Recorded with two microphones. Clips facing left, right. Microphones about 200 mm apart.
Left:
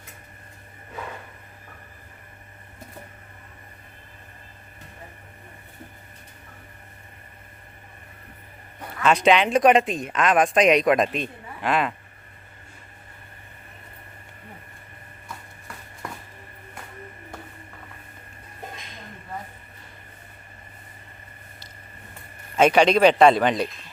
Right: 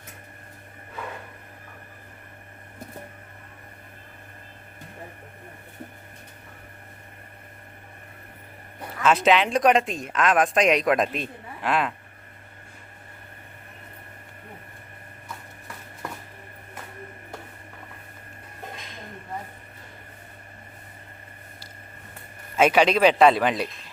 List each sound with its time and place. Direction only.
9.0 s speech: centre (ahead or behind)
22.5 s speech: 5° right (ahead or behind)